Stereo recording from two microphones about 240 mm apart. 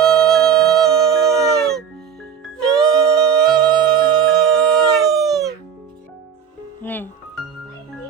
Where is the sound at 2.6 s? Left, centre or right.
Centre.